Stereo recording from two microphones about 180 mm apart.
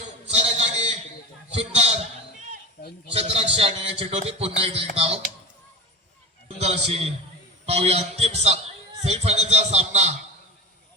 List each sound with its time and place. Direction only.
0.3 s a sound: 40° right (ahead or behind)
1.7 s music: 35° right (ahead or behind)
3.2 s a sound: 35° right (ahead or behind)
3.5 s music: 35° right (ahead or behind)
6.6 s a man's voice: 35° right (ahead or behind)
7.7 s music: 35° right (ahead or behind)